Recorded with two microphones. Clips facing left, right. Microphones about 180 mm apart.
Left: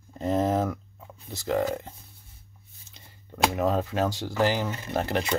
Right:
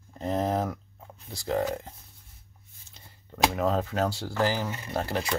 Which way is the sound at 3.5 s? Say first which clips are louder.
Left 1 dB; 20° left (ahead or behind).